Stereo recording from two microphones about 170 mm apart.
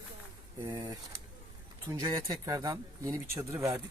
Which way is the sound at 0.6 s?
20° right (ahead or behind).